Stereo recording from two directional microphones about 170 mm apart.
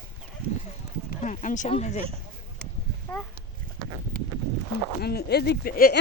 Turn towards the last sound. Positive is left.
turn(degrees=65)  # may be behind; listen again after turning